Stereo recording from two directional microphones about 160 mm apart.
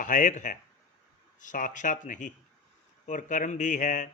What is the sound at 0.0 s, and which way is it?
Speech, 55° left (ahead or behind).